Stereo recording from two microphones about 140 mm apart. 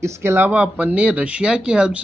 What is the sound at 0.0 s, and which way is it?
Speech, 20° right (ahead or behind).